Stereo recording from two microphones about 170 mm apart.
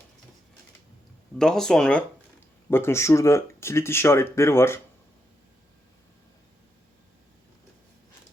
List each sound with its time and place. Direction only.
1.4 s speech: 5° left (ahead or behind)